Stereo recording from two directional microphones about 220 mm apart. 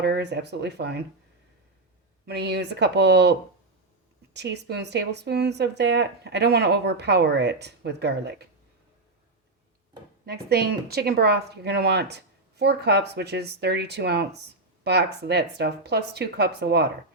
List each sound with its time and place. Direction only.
0.0 s speech: 50° right (ahead or behind)
2.2 s speech: 50° right (ahead or behind)
4.4 s speech: 50° right (ahead or behind)
10.2 s speech: 45° right (ahead or behind)